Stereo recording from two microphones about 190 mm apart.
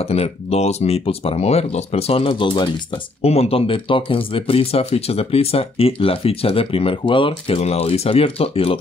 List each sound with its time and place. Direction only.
0.0 s speech: 35° left (ahead or behind)